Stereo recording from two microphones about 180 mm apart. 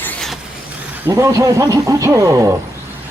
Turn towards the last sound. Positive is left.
turn(degrees=-20)  # may be behind; listen again after turning